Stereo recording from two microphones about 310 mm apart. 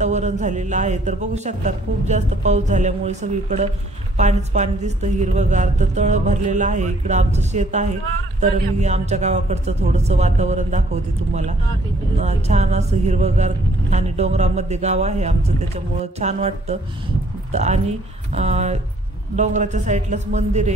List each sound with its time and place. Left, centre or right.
0.0 s a woman's voice: right
12.2 s a woman's voice: right